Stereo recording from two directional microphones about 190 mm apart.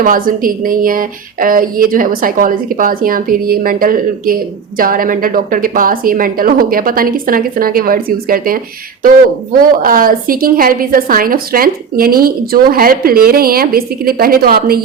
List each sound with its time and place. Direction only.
0.0 s a woman's voice: 45° right (ahead or behind)
9.6 s a woman's voice: 50° right (ahead or behind)